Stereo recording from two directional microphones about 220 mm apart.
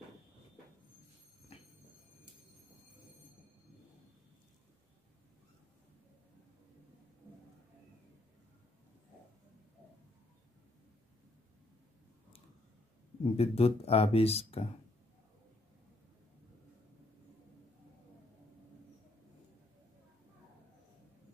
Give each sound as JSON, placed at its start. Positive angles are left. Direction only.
{"t": 13.2, "sound": "speech", "side_deg": 25}